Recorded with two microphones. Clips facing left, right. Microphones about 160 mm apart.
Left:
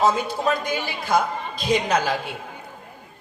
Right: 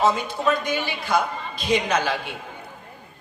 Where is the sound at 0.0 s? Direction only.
40° left (ahead or behind).